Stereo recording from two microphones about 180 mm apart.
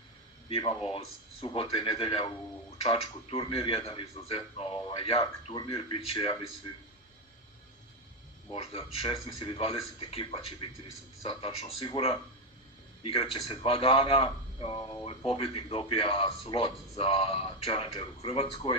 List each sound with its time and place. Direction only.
0.5 s a man's voice: 30° left (ahead or behind)
8.5 s a man's voice: 35° left (ahead or behind)